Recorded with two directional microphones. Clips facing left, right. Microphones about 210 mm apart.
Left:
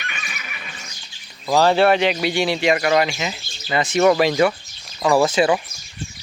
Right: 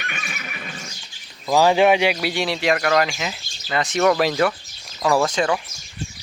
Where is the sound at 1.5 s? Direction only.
10° right (ahead or behind).